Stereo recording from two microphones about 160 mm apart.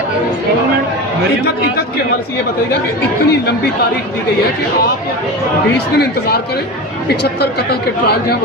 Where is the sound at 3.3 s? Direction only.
90° left.